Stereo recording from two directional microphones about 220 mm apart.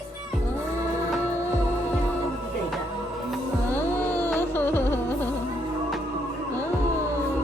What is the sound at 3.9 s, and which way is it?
Music, 10° left (ahead or behind).